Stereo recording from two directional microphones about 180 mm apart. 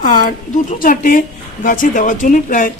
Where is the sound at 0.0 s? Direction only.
50° left (ahead or behind).